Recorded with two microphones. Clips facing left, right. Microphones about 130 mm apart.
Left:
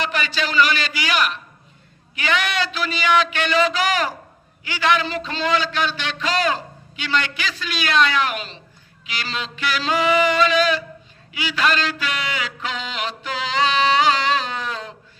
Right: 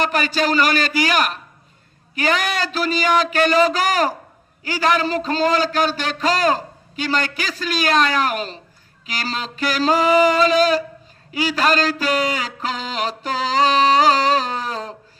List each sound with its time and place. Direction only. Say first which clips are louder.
0.0 s a man's voice: right 5 dB; 45° right (ahead or behind)